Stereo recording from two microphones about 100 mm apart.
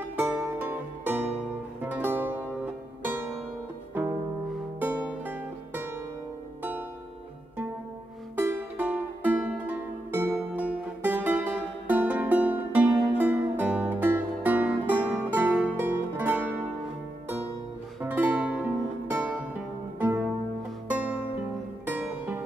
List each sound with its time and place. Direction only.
0.0 s music: 15° right (ahead or behind)
4.7 s music: 15° right (ahead or behind)
8.4 s music: 15° right (ahead or behind)
18.0 s music: 15° right (ahead or behind)